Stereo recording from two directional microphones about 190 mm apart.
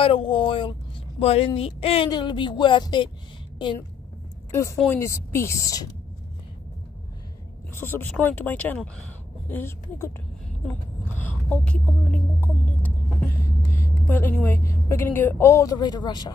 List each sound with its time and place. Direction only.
0.0 s speech: 30° left (ahead or behind)
4.5 s a woman's voice: 15° left (ahead or behind)
7.7 s speech: 10° left (ahead or behind)